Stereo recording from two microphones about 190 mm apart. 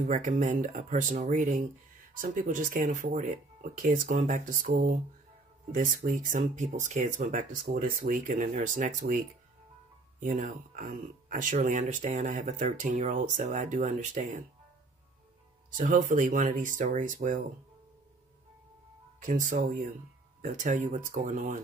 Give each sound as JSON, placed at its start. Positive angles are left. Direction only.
{"t": 0.0, "sound": "speech", "side_deg": -40}
{"t": 10.2, "sound": "speech", "side_deg": -45}
{"t": 15.7, "sound": "speech", "side_deg": -45}
{"t": 19.1, "sound": "speech", "side_deg": -45}